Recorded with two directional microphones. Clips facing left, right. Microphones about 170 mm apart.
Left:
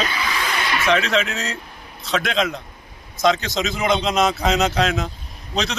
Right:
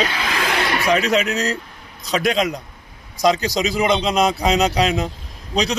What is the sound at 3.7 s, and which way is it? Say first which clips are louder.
Speech: right 1 dB; 10° right (ahead or behind).